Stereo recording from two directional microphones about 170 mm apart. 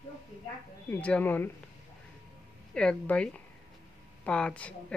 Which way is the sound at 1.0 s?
10° left (ahead or behind).